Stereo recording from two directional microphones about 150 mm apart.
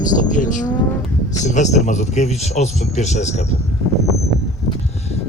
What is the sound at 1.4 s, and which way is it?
Speech, 50° left (ahead or behind).